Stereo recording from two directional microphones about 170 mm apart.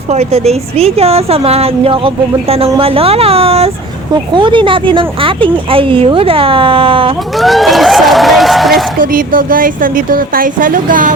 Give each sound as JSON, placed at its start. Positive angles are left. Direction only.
{"t": 0.1, "sound": "a woman's voice", "side_deg": -40}
{"t": 7.3, "sound": "speech", "side_deg": 0}
{"t": 9.0, "sound": "speech", "side_deg": -55}